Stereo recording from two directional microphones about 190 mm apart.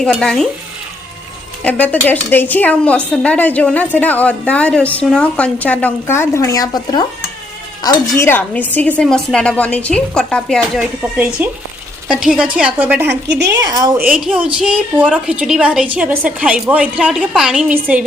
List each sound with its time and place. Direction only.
0.0 s speech: 5° left (ahead or behind)
1.6 s a woman's voice: 10° left (ahead or behind)
11.4 s a woman's voice: 10° right (ahead or behind)
13.1 s a woman's voice: 65° right (ahead or behind)
13.7 s a woman's voice: 20° right (ahead or behind)
14.1 s a woman's voice: 5° right (ahead or behind)